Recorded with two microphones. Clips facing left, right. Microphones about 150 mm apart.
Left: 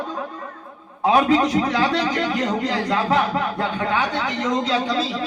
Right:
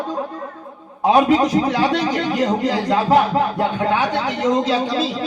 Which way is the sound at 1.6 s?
25° right (ahead or behind).